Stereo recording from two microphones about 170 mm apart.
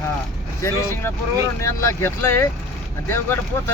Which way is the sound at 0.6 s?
15° left (ahead or behind).